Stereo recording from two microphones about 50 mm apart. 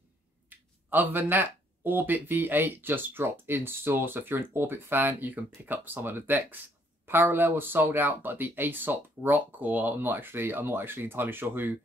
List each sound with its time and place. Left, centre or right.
0.5 s speech: right